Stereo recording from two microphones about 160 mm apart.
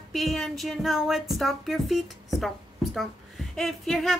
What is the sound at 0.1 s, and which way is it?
A woman's voice, centre (ahead or behind).